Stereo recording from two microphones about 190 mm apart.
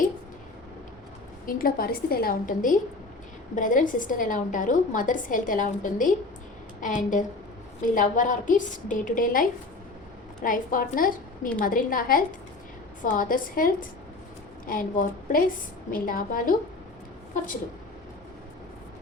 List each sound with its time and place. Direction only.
1.5 s a woman's voice: 50° left (ahead or behind)